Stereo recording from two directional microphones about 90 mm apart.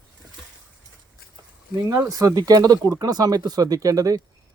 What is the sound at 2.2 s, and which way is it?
Speech, 40° right (ahead or behind).